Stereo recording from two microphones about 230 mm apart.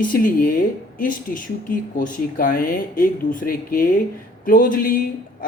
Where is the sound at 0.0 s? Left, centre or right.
Left.